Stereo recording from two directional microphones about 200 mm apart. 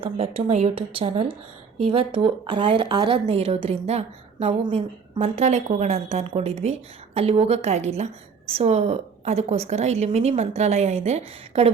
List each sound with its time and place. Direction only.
0.0 s a woman's voice: 30° right (ahead or behind)